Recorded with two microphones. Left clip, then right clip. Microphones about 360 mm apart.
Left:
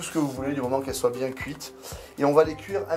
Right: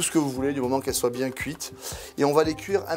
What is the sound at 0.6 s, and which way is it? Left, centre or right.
Speech, right.